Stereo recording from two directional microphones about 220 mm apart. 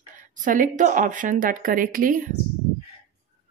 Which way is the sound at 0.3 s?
35° right (ahead or behind).